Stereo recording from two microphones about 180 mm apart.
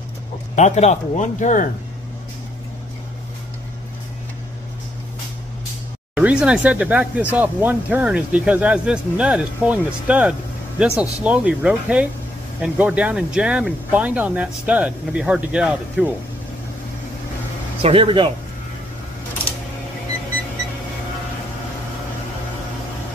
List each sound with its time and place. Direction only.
0.6 s speech: 40° left (ahead or behind)
6.1 s speech: 5° right (ahead or behind)
17.8 s speech: 30° right (ahead or behind)